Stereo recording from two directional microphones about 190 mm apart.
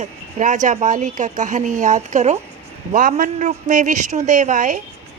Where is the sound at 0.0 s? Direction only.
40° right (ahead or behind).